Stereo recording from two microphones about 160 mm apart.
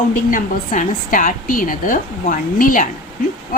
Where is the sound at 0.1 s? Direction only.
55° left (ahead or behind).